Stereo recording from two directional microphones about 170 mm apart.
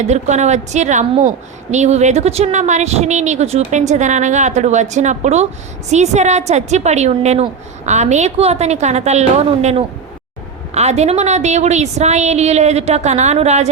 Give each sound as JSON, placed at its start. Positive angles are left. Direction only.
{"t": 0.0, "sound": "a woman's voice", "side_deg": -40}